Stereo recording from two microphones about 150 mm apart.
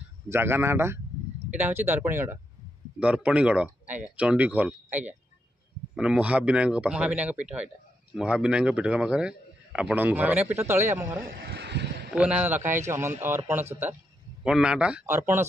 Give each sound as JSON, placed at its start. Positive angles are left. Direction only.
{"t": 0.3, "sound": "a man's voice", "side_deg": -15}
{"t": 11.2, "sound": "a sound", "side_deg": -90}
{"t": 12.1, "sound": "a man's voice", "side_deg": -10}